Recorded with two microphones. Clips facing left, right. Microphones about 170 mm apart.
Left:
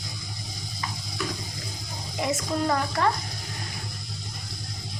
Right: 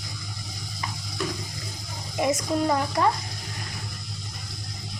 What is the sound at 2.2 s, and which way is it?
Speech, 20° right (ahead or behind).